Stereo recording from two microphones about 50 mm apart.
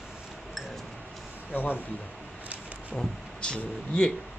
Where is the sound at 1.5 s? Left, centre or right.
Left.